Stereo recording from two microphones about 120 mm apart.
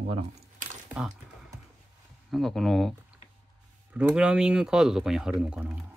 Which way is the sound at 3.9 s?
10° right (ahead or behind).